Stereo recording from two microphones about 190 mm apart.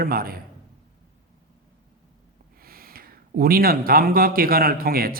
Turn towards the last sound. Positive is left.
turn(degrees=-50)  # may be behind; listen again after turning